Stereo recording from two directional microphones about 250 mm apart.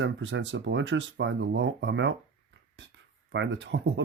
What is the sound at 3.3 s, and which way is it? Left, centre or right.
Speech, right.